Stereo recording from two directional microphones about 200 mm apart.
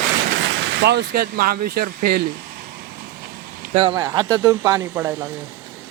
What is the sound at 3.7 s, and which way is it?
Speech, 30° right (ahead or behind).